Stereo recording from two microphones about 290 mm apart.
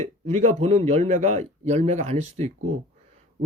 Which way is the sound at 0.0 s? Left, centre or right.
Right.